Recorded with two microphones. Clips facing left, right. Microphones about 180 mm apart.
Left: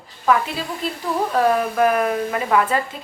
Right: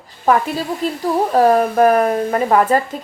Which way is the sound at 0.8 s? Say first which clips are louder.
Right 5 dB; 45° right (ahead or behind).